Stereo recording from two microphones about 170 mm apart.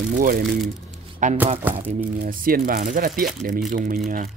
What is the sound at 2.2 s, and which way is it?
Speech, 55° right (ahead or behind).